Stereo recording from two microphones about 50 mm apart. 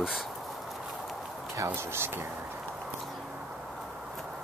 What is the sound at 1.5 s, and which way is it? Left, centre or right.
Speech, right.